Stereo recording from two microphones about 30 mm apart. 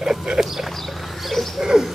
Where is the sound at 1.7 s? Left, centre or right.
Centre.